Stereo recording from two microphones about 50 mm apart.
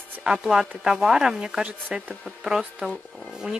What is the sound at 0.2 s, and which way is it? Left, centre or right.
Speech, centre.